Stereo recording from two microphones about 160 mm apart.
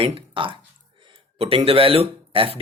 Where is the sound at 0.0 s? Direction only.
35° right (ahead or behind).